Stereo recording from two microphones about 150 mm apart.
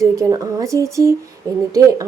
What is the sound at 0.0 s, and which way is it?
A woman's voice, 20° right (ahead or behind).